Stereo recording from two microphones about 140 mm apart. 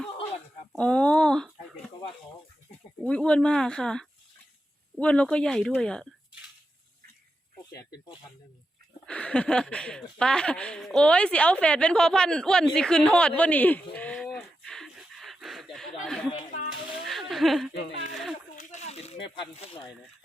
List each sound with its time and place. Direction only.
0.7 s speech: 5° left (ahead or behind)
3.0 s speech: 5° left (ahead or behind)
9.0 s speech: 10° left (ahead or behind)
16.3 s speech: 70° left (ahead or behind)
17.1 s a sound: centre (ahead or behind)
18.5 s speech: 55° left (ahead or behind)